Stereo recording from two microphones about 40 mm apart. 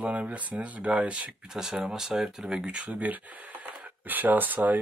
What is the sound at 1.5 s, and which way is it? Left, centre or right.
Speech, centre.